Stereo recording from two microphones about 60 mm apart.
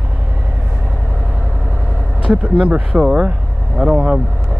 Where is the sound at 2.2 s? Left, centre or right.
Right.